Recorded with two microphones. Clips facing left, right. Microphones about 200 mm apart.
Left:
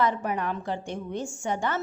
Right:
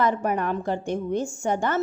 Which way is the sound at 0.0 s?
50° right (ahead or behind).